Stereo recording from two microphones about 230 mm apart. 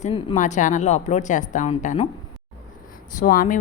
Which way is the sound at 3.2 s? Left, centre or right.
Left.